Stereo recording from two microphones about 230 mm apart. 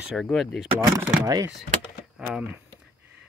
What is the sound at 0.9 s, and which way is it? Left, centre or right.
Speech, centre.